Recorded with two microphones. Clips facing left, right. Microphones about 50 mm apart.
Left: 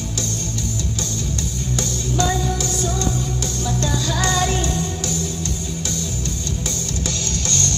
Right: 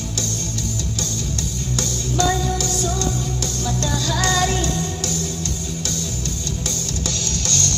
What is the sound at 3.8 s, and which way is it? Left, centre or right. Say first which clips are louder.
Music: even; left.